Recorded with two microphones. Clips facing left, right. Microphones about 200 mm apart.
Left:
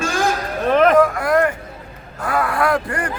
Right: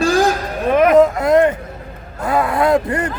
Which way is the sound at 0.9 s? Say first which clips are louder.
Right 4 dB; 20° right (ahead or behind).